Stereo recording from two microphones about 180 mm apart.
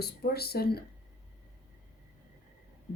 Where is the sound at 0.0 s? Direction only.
60° left (ahead or behind).